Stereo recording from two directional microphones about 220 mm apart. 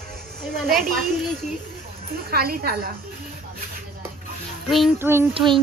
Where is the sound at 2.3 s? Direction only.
45° right (ahead or behind).